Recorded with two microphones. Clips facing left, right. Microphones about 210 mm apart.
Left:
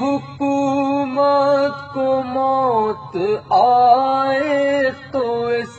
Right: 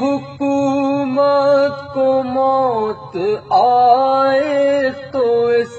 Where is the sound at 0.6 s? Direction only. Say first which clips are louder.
Right 2 dB; centre (ahead or behind).